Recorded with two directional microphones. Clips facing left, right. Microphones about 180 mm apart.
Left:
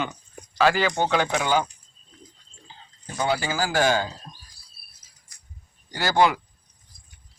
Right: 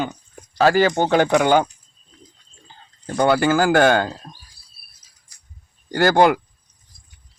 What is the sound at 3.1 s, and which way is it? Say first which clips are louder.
A man's voice: right 9 dB; 60° right (ahead or behind).